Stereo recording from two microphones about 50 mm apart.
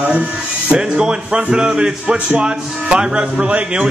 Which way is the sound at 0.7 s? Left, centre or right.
Centre.